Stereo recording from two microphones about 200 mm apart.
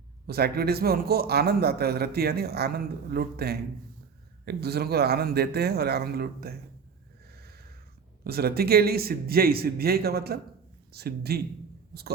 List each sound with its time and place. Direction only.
0.3 s speech: 50° right (ahead or behind)
7.3 s a sound: 50° right (ahead or behind)
8.2 s speech: 50° right (ahead or behind)